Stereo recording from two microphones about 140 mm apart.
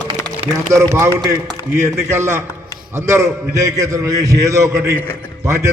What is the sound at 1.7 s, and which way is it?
A man's voice, 20° right (ahead or behind).